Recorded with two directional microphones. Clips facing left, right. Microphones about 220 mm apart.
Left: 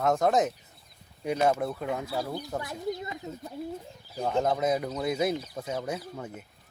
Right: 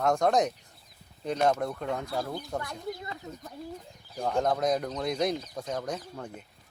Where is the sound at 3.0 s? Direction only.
15° left (ahead or behind).